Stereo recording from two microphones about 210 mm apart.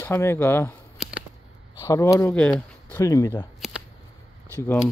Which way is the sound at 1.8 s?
15° left (ahead or behind).